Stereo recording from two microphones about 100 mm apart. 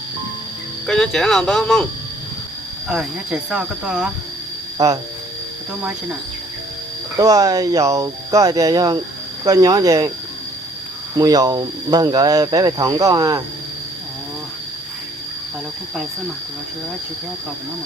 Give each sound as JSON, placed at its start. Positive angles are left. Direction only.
{"t": 0.9, "sound": "speech", "side_deg": 5}
{"t": 2.9, "sound": "speech", "side_deg": -10}
{"t": 7.2, "sound": "speech", "side_deg": -35}
{"t": 11.2, "sound": "speech", "side_deg": -40}